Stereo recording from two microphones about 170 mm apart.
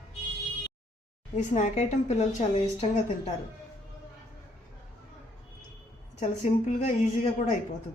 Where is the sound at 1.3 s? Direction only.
45° left (ahead or behind).